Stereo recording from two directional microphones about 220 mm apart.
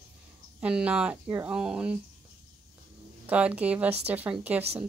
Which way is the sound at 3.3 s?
5° right (ahead or behind).